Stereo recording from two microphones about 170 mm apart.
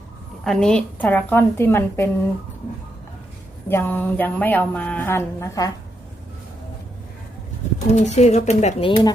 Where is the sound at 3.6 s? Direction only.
10° left (ahead or behind).